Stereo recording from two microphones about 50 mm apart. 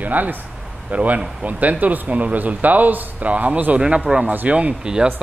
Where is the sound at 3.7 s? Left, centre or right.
Centre.